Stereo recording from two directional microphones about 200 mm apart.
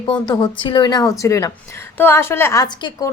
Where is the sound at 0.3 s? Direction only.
20° left (ahead or behind).